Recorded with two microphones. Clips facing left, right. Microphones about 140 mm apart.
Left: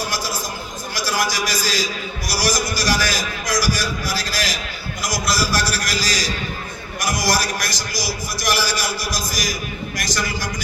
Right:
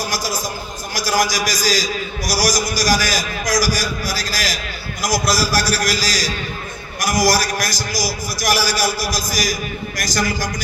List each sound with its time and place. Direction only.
0.9 s a man's voice: 40° right (ahead or behind)